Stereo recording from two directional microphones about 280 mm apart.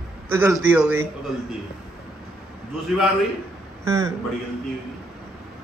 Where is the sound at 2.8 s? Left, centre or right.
Centre.